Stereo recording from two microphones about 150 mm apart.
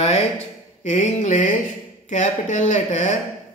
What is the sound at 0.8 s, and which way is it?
Speech, 50° left (ahead or behind).